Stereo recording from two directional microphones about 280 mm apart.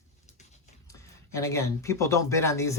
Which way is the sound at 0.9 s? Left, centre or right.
Centre.